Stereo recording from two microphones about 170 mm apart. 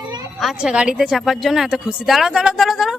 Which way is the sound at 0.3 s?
Centre (ahead or behind).